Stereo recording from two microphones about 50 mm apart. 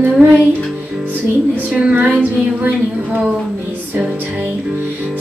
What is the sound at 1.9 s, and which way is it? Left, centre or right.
Child singing, right.